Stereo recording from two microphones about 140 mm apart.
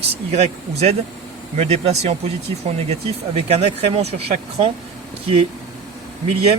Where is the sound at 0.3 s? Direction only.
50° right (ahead or behind).